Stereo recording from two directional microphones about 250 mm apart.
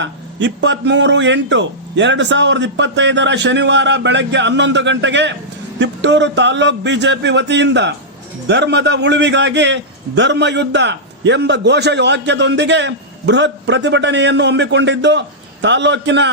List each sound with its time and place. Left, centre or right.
0.0 s a man's voice: right